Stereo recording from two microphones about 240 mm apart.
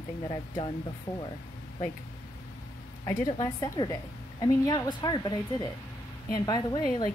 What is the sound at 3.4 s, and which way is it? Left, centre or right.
A woman's voice, centre.